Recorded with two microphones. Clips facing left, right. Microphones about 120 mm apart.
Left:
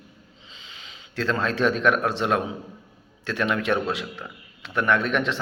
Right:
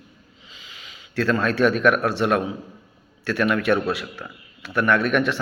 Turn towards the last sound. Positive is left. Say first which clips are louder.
# right 3 dB
turn(degrees=20)  # may be behind; listen again after turning